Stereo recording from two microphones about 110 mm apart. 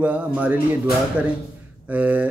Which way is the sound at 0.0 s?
15° right (ahead or behind).